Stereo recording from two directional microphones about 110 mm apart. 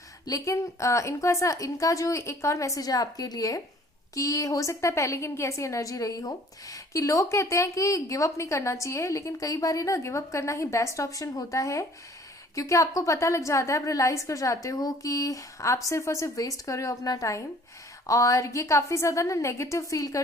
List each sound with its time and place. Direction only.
0.3 s a woman's voice: 30° left (ahead or behind)